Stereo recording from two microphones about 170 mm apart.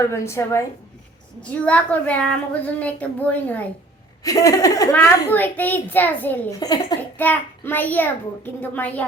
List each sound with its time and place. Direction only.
0.0 s a child's voice: 15° left (ahead or behind)
4.2 s a child's voice: 20° left (ahead or behind)